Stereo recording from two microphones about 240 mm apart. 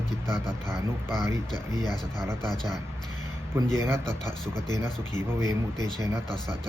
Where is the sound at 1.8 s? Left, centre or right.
Centre.